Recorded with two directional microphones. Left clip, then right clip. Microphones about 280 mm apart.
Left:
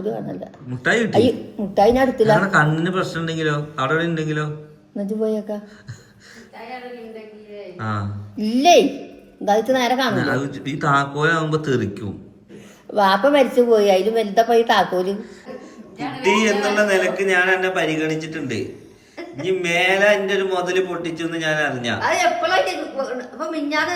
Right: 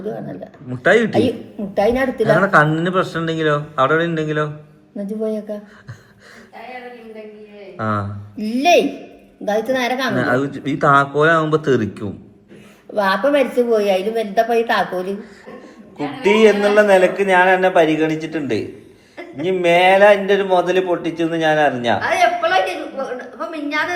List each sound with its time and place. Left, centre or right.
0.0 s a man's voice: centre
7.8 s a man's voice: centre
22.0 s a sound: left